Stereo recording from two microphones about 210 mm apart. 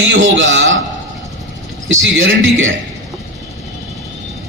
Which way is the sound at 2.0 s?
65° right (ahead or behind).